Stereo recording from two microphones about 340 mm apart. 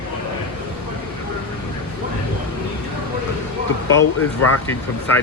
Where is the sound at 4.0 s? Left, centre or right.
Left.